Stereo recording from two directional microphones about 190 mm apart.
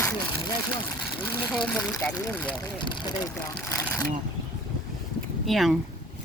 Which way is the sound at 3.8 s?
5° left (ahead or behind).